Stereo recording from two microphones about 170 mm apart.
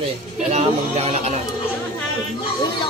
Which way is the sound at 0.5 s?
40° right (ahead or behind).